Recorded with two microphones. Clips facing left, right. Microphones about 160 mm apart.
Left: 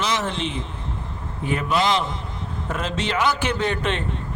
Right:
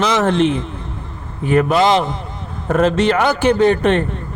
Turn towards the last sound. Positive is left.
turn(degrees=-50)  # may be behind; listen again after turning